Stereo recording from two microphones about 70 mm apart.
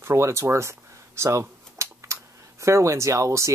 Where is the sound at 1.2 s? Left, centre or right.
Right.